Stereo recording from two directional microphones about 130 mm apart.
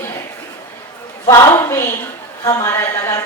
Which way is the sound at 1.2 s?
25° left (ahead or behind).